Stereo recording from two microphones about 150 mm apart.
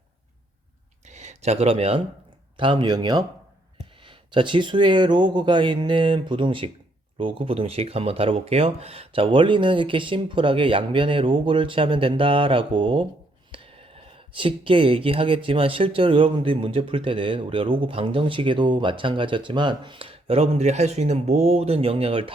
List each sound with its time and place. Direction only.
1.0 s speech: 50° right (ahead or behind)